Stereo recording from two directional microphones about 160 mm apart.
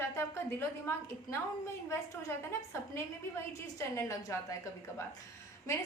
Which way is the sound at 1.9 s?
15° left (ahead or behind).